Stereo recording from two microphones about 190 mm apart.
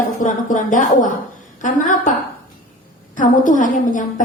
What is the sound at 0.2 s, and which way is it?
Speech, 40° left (ahead or behind).